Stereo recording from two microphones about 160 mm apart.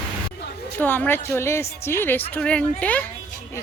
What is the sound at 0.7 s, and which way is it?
A woman's voice, 10° left (ahead or behind).